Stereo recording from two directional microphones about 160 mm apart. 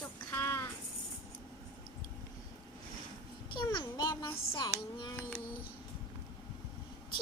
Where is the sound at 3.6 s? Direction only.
25° left (ahead or behind).